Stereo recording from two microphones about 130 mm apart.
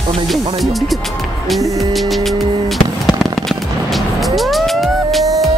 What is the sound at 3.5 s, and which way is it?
Music, centre (ahead or behind).